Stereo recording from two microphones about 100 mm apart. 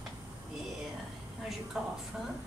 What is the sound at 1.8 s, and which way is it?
Speech, 5° right (ahead or behind).